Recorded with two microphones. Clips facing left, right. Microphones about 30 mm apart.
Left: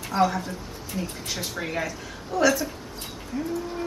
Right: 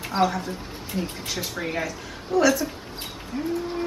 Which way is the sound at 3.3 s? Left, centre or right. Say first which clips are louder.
Right 1 dB; right.